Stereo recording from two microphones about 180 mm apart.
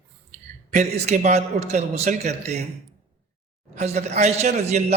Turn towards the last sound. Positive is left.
turn(degrees=-40)  # may be behind; listen again after turning